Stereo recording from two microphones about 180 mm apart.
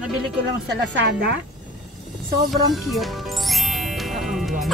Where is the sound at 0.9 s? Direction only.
80° right.